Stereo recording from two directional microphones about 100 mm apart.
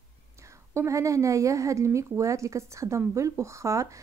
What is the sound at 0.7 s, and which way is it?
Speech, 30° right (ahead or behind).